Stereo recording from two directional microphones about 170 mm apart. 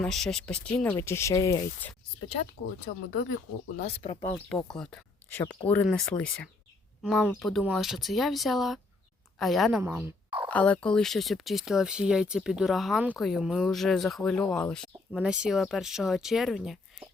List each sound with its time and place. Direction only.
0.0 s speech: centre (ahead or behind); by 1.6 s 20° left (ahead or behind)
2.8 s speech: 50° left (ahead or behind)
3.8 s speech: 35° left (ahead or behind)
4.4 s speech: 5° left (ahead or behind)